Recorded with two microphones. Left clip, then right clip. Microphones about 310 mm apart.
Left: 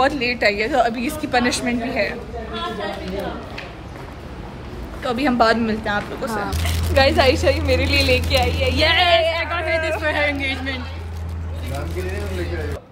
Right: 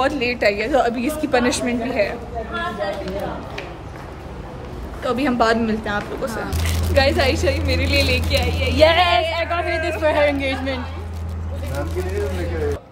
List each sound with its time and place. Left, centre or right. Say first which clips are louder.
0.0 s a woman's voice: left 1 dB; centre
5.0 s a woman's voice: left 1 dB; centre
6.5 s female singing: even; centre
6.9 s speech: left 2 dB; centre
8.7 s female singing: right 2 dB; right
10.0 s a woman's voice: right 3 dB; centre